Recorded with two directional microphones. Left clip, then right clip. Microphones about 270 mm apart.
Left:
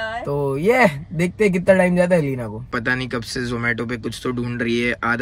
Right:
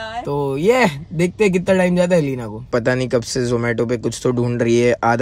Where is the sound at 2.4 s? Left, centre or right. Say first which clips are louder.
Right 5 dB; right.